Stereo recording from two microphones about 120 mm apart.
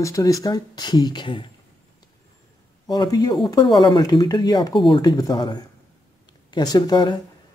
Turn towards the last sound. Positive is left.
turn(degrees=40)  # may be behind; listen again after turning